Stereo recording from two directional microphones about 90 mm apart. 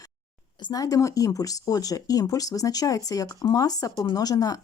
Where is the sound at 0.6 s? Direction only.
45° left (ahead or behind).